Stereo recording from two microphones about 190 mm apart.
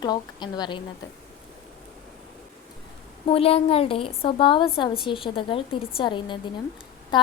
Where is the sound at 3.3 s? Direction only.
30° left (ahead or behind).